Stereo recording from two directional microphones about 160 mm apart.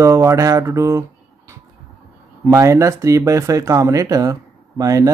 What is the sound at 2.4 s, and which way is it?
Speech, 20° right (ahead or behind).